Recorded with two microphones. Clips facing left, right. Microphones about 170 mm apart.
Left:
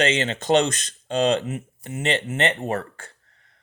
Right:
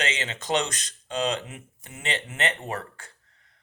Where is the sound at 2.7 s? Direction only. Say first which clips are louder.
Left 6 dB; 50° left (ahead or behind).